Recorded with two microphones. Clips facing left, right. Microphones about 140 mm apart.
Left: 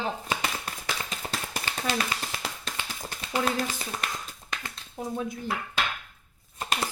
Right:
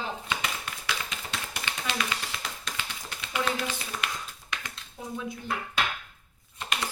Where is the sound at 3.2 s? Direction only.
40° left (ahead or behind).